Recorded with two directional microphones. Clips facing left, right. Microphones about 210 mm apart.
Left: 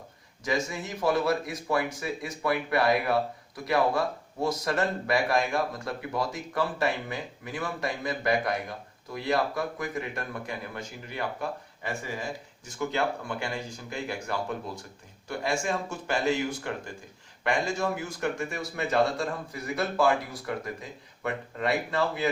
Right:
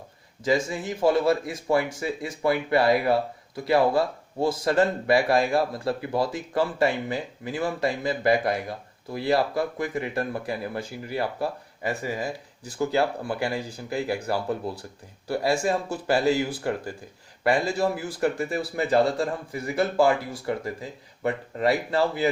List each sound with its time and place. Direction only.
0.4 s speech: 30° right (ahead or behind)